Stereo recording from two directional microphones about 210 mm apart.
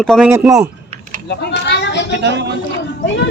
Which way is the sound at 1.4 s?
55° left (ahead or behind).